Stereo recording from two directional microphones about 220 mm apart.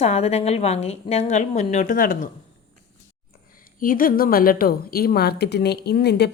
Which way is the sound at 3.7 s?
40° left (ahead or behind).